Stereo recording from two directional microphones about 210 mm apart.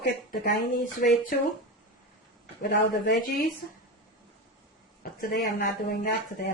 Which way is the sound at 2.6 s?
45° left (ahead or behind).